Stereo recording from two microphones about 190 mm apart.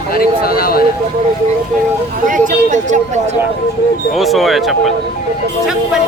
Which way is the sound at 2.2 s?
45° right (ahead or behind).